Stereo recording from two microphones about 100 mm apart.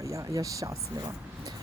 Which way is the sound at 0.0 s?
30° right (ahead or behind).